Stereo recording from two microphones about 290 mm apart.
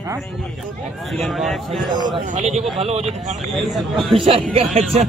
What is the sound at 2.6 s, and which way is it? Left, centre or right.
Speech, centre.